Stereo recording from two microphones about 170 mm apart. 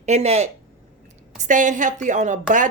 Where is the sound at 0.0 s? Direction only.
40° right (ahead or behind).